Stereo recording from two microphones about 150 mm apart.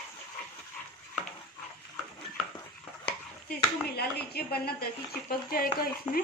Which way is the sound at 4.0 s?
90° left.